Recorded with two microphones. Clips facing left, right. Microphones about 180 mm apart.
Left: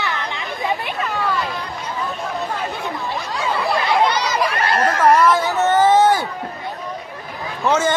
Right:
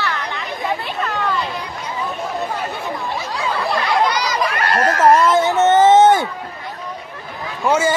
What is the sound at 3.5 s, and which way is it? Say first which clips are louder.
Chatter: left 1 dB; centre (ahead or behind).